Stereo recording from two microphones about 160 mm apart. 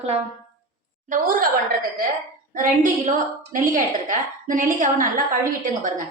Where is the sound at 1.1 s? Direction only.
60° right (ahead or behind).